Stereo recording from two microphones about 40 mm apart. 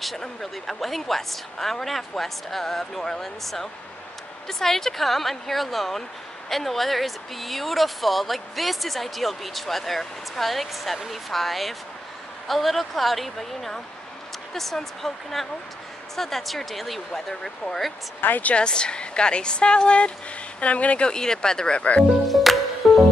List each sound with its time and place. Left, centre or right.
0.0 s speech: centre
18.2 s speech: left
18.5 s a woman's voice: left
21.1 s speech: centre
22.3 s music: centre